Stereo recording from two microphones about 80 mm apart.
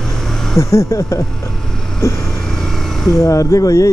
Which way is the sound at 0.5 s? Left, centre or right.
Left.